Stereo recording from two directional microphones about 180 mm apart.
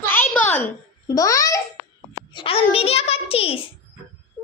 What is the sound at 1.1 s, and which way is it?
Speech, 20° left (ahead or behind).